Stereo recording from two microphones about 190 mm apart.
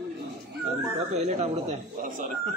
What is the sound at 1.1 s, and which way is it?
Speech, 35° right (ahead or behind).